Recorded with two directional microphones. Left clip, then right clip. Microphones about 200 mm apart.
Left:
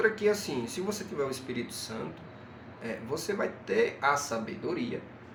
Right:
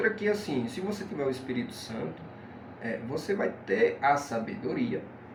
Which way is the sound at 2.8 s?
35° left (ahead or behind).